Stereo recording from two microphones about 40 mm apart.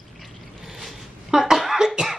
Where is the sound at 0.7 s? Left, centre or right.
Centre.